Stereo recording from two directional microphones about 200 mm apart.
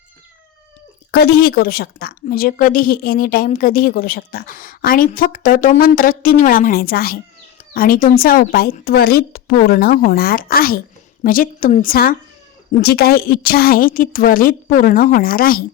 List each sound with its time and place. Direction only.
1.1 s a woman's voice: 50° left (ahead or behind)